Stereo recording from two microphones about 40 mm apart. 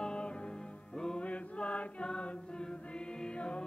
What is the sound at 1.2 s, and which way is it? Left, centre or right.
Chant, left.